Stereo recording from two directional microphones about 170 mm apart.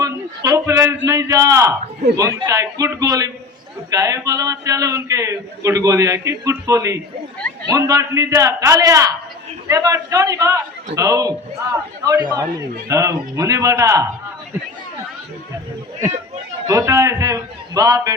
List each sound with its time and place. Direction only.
0.0 s a man's voice: 20° right (ahead or behind)
16.6 s a man's voice: 20° right (ahead or behind)